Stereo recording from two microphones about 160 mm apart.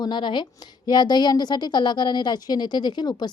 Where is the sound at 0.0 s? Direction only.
30° left (ahead or behind).